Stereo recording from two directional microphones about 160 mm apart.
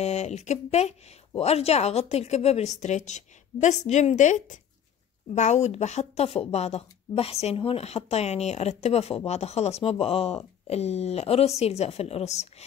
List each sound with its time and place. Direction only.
0.0 s a woman's voice: 45° left (ahead or behind)